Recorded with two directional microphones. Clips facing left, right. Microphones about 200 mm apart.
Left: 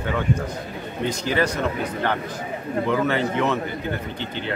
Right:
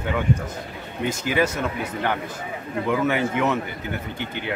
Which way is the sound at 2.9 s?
10° right (ahead or behind).